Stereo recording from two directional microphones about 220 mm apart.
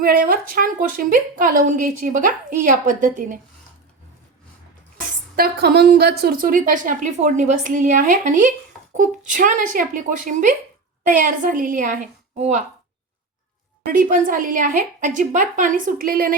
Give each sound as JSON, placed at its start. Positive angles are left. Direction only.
{"t": 0.0, "sound": "a woman's voice", "side_deg": -40}
{"t": 4.9, "sound": "a woman's voice", "side_deg": -45}
{"t": 13.8, "sound": "a woman's voice", "side_deg": -40}